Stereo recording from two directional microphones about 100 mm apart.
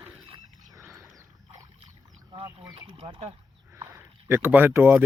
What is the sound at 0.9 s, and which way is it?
Wild animals, 35° right (ahead or behind).